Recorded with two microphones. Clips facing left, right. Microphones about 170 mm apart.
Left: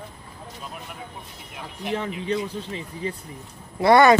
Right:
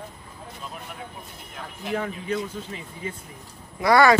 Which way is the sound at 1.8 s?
25° left (ahead or behind).